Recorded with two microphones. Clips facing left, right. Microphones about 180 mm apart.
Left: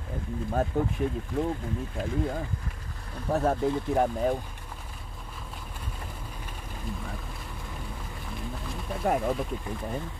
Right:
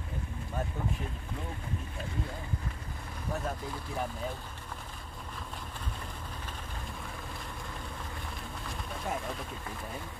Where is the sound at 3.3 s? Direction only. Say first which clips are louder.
Left 13 dB; 65° left (ahead or behind).